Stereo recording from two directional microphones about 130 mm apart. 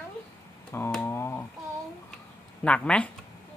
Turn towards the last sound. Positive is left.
turn(degrees=10)  # may be behind; listen again after turning